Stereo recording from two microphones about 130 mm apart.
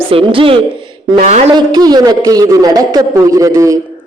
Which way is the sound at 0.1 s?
45° right (ahead or behind).